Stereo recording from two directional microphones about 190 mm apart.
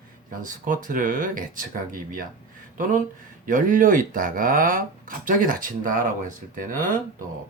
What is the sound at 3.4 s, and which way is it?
Speech, 45° right (ahead or behind).